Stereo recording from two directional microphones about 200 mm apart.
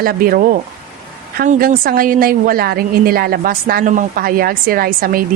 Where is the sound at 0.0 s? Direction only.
45° right (ahead or behind).